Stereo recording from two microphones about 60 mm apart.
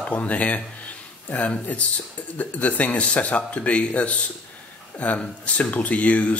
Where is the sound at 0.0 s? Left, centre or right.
Left.